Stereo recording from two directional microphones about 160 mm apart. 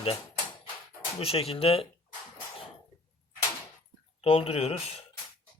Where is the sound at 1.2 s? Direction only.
35° left (ahead or behind).